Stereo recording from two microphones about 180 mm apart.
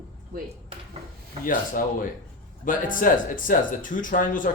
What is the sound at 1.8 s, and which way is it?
Speech, 50° left (ahead or behind).